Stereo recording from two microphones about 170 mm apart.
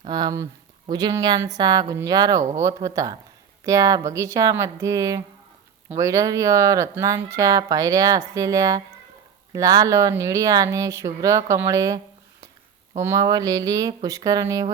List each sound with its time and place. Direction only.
0.1 s speech: 25° right (ahead or behind)
13.0 s speech: 20° right (ahead or behind)